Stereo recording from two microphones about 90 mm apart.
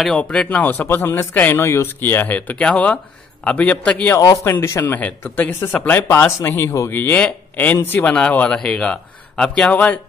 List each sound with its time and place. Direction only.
0.2 s speech: 10° left (ahead or behind)
4.4 s speech: 30° left (ahead or behind)
6.9 s speech: 20° left (ahead or behind)